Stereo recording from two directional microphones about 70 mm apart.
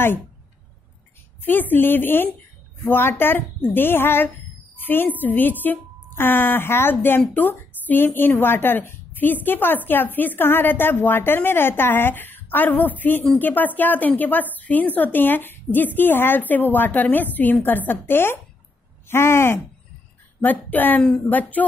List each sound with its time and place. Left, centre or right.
1.4 s a woman's voice: left
20.4 s a woman's voice: left